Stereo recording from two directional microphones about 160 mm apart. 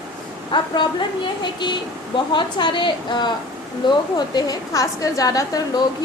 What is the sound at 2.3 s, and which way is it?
A woman's voice, 30° left (ahead or behind).